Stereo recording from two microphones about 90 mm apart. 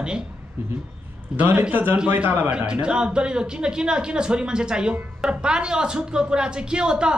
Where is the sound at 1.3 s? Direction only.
20° right (ahead or behind).